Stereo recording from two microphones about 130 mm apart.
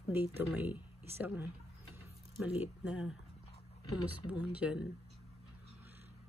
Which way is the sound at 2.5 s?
10° right (ahead or behind).